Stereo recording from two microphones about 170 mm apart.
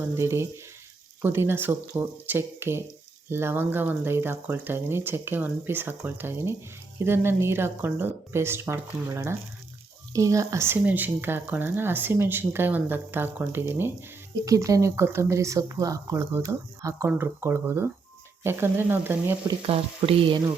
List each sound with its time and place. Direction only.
0.1 s speech: 15° right (ahead or behind)
19.6 s frying: 35° right (ahead or behind)